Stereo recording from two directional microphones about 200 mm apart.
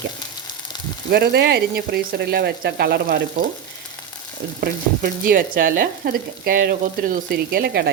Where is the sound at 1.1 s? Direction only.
55° right (ahead or behind).